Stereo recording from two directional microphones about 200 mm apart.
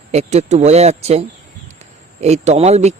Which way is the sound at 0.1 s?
35° right (ahead or behind).